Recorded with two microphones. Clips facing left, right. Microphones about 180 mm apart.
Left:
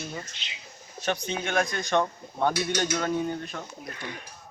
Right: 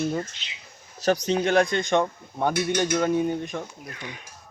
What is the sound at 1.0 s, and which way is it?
Speech, 40° right (ahead or behind).